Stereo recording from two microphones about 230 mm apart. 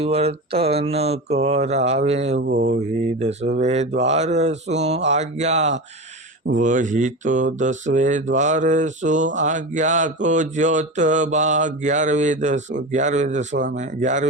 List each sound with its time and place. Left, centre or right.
0.0 s mantra: right
2.5 s speech: right
3.0 s mantra: right